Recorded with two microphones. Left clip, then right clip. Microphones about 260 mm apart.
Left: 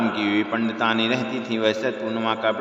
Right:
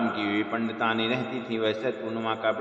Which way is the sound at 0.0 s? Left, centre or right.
Left.